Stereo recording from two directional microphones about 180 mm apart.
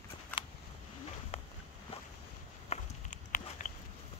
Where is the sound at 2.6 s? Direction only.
40° left (ahead or behind).